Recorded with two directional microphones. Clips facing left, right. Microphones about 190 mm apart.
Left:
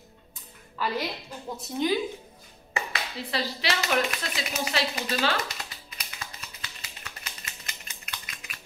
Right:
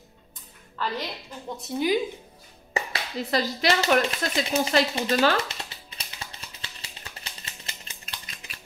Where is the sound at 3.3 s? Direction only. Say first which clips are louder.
Right 5 dB; 45° right (ahead or behind).